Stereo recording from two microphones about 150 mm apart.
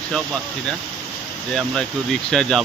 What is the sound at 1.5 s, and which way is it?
Speech, centre (ahead or behind).